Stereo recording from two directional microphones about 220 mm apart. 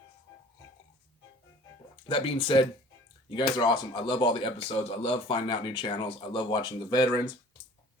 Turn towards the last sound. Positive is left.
turn(degrees=15)  # may be behind; listen again after turning